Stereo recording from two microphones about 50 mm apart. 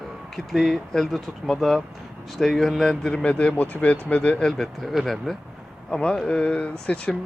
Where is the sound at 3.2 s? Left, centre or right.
Left.